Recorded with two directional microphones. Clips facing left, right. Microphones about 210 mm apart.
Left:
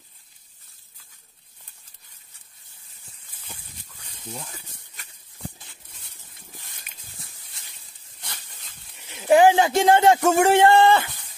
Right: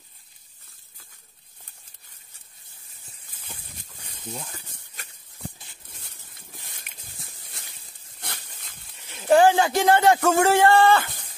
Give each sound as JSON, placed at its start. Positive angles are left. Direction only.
{"t": 8.2, "sound": "dog", "side_deg": -60}
{"t": 8.9, "sound": "a man's voice", "side_deg": 15}